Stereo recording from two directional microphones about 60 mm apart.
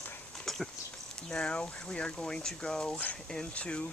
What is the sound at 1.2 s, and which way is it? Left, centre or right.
Speech, centre.